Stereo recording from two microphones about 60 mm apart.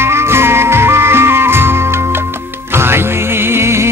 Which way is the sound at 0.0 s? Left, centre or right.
Right.